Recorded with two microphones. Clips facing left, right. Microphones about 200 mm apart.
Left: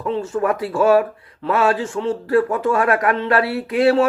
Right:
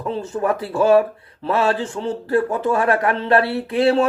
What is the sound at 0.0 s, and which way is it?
Speech, 30° right (ahead or behind).